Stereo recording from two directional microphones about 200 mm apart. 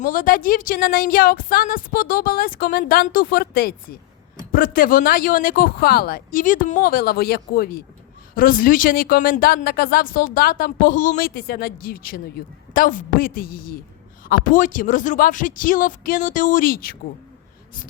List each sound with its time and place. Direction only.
0.0 s speech: 45° left (ahead or behind)